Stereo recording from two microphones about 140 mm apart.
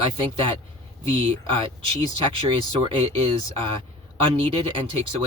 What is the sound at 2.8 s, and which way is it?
Speech, 40° right (ahead or behind).